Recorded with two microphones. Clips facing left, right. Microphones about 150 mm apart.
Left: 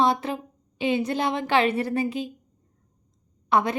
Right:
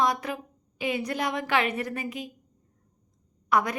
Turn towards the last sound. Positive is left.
turn(degrees=25)  # may be behind; listen again after turning